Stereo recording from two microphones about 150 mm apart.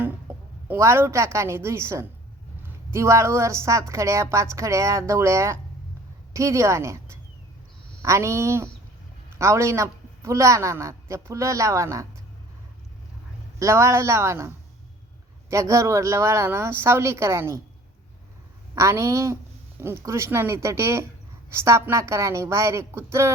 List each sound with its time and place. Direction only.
0.7 s a woman's voice: 15° right (ahead or behind)
13.6 s a woman's voice: 20° right (ahead or behind)
18.7 s a woman's voice: 20° right (ahead or behind)